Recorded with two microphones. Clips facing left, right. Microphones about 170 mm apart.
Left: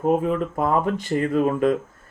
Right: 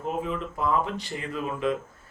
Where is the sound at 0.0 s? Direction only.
50° left (ahead or behind).